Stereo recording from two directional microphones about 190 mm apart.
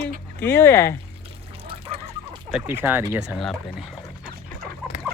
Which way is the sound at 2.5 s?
10° right (ahead or behind).